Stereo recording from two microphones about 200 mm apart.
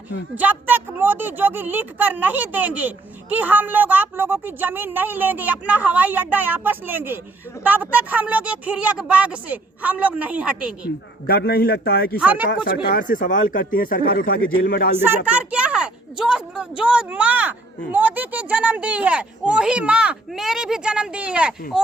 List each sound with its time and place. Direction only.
0.3 s speech: 10° right (ahead or behind)
11.3 s speech: 50° left (ahead or behind)
12.2 s speech: 10° right (ahead or behind)
12.6 s speech: 50° left (ahead or behind)
14.9 s speech: 10° right (ahead or behind)